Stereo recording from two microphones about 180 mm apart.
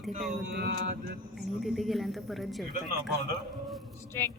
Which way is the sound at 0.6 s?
60° right (ahead or behind).